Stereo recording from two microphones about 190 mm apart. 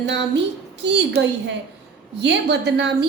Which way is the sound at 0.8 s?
65° right (ahead or behind).